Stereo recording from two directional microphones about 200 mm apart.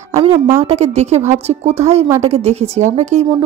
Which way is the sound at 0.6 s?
35° right (ahead or behind).